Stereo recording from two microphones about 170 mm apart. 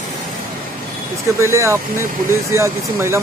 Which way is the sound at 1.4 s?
15° right (ahead or behind).